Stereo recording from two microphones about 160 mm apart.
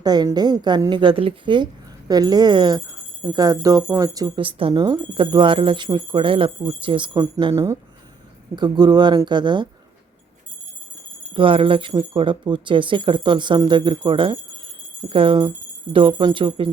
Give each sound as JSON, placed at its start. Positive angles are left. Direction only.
{"t": 0.0, "sound": "speech", "side_deg": -25}
{"t": 7.5, "sound": "speech", "side_deg": -15}
{"t": 11.3, "sound": "speech", "side_deg": -35}